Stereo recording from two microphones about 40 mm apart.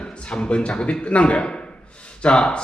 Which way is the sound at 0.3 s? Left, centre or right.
Left.